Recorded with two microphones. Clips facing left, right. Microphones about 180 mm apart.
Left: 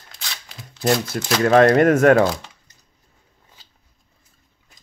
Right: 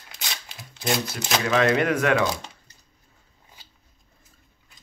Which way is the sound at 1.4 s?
50° left (ahead or behind).